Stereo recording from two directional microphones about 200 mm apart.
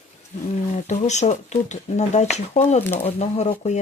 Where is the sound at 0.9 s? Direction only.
35° left (ahead or behind).